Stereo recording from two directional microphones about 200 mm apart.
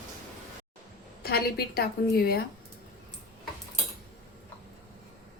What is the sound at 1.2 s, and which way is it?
A woman's voice, 50° left (ahead or behind).